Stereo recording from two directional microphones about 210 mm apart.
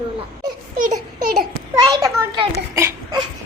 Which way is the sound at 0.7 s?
35° right (ahead or behind).